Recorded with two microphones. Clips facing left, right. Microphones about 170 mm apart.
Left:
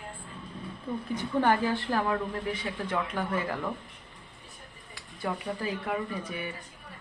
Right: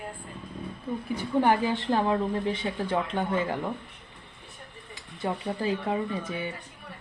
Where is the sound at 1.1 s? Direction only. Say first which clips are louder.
Right 2 dB; 15° right (ahead or behind).